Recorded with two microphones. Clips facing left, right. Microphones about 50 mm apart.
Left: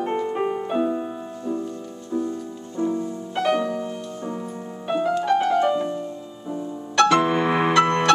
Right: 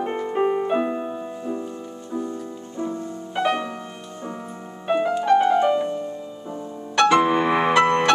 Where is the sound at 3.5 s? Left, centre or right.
Right.